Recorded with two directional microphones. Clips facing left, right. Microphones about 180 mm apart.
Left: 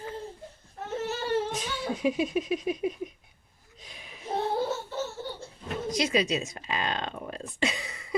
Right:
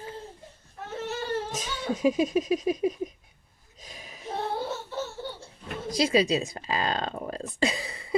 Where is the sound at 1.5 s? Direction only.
45° right (ahead or behind).